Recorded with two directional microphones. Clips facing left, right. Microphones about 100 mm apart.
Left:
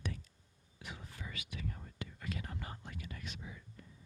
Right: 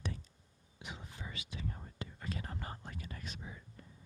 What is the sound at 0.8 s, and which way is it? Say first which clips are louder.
Whispering: right 1 dB; 20° right (ahead or behind).